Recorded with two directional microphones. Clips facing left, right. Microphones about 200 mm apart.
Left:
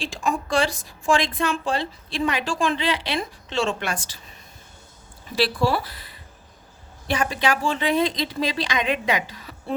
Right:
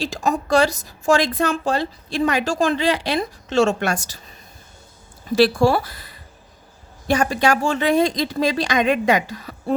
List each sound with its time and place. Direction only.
0.0 s a woman's voice: 40° right (ahead or behind)
5.4 s a woman's voice: 45° right (ahead or behind)